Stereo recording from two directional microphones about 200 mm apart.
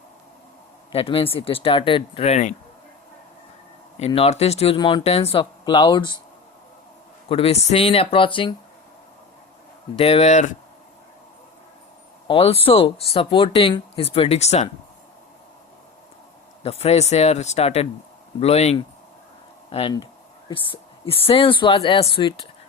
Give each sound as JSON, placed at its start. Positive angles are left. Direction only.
{"t": 0.9, "sound": "speech", "side_deg": 30}
{"t": 3.9, "sound": "speech", "side_deg": 30}
{"t": 7.3, "sound": "speech", "side_deg": 30}
{"t": 9.9, "sound": "speech", "side_deg": 30}
{"t": 12.3, "sound": "speech", "side_deg": 30}
{"t": 16.6, "sound": "speech", "side_deg": 30}